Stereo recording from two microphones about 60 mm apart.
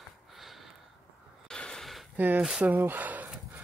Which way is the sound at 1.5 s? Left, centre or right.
Centre.